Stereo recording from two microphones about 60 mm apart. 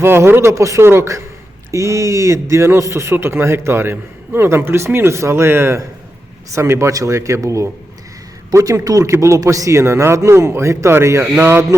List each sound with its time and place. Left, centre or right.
0.0 s speech: right
0.5 s speech: right
0.8 s a man's voice: right
1.7 s a man's voice: right
6.5 s speech: right
8.4 s a man's voice: right
8.8 s a man's voice: right